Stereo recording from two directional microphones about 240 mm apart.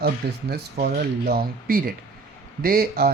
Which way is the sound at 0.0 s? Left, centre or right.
Right.